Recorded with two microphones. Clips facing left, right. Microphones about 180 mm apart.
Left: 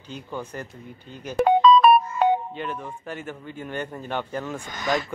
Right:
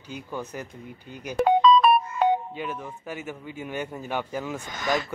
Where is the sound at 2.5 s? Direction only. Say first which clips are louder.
Left 1 dB; 5° right (ahead or behind).